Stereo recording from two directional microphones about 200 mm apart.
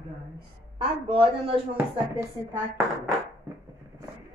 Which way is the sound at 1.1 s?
25° right (ahead or behind).